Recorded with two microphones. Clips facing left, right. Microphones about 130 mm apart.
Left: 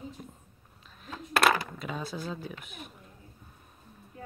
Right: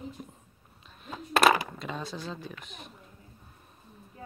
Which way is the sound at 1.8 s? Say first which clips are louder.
Left 1 dB; 5° left (ahead or behind).